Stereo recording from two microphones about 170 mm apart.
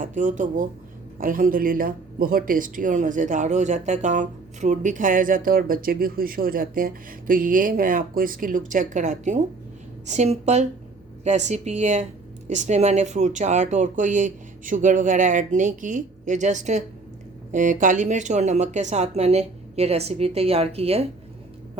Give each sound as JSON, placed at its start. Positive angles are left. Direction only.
{"t": 0.0, "sound": "speech", "side_deg": -50}